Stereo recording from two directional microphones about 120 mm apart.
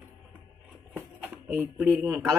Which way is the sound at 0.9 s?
20° right (ahead or behind).